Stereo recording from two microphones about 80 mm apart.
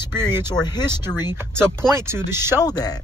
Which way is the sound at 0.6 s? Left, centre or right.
Left.